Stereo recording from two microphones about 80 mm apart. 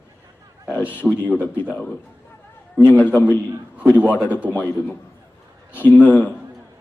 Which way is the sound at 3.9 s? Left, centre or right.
Right.